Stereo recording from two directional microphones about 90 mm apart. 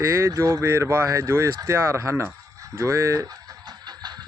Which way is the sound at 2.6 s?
30° right (ahead or behind).